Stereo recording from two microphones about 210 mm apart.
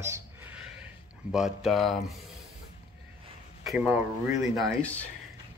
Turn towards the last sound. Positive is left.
turn(degrees=5)  # may be behind; listen again after turning